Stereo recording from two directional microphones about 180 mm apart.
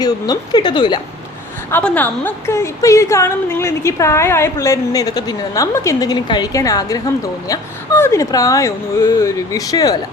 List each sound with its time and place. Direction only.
0.0 s speech: 25° left (ahead or behind)
1.7 s a woman's voice: 10° left (ahead or behind)